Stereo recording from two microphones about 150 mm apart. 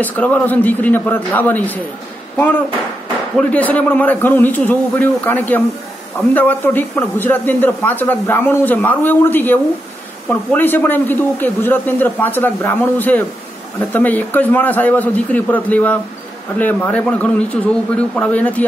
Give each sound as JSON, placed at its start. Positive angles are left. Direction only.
{"t": 0.0, "sound": "a man's voice", "side_deg": 10}
{"t": 3.3, "sound": "a man's voice", "side_deg": 10}